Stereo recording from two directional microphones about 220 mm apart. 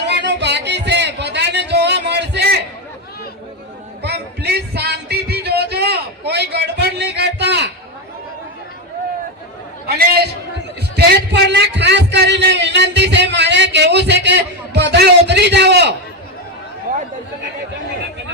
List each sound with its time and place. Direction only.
0.1 s music: 50° right (ahead or behind)
4.0 s music: 50° right (ahead or behind)
9.8 s a sound: 45° right (ahead or behind)